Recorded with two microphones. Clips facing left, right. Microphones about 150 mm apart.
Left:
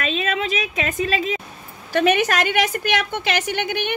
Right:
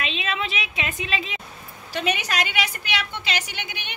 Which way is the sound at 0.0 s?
45° left (ahead or behind).